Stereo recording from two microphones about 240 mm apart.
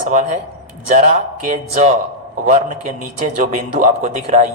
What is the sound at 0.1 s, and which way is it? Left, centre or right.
A man's voice, right.